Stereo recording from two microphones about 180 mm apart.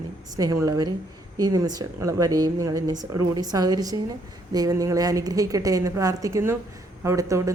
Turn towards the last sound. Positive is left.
turn(degrees=-15)  # may be behind; listen again after turning